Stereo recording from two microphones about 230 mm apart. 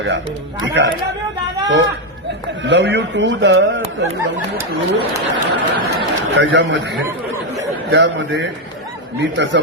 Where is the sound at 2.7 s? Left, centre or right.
Right.